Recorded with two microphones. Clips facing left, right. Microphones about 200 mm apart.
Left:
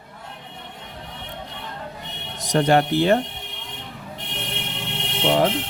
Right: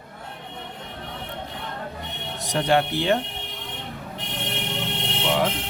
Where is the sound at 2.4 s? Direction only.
45° left (ahead or behind).